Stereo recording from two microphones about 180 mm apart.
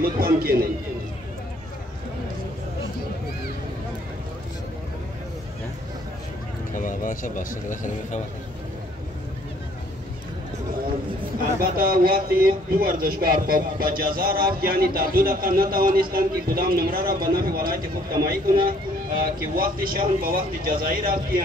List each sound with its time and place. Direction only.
0.0 s speech: 55° right (ahead or behind)
6.7 s speech: 50° left (ahead or behind)
11.6 s speech: 55° right (ahead or behind)